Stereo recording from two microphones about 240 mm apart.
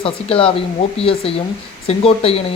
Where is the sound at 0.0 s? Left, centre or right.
Left.